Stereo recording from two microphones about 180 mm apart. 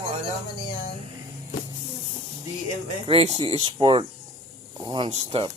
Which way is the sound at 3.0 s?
30° right (ahead or behind).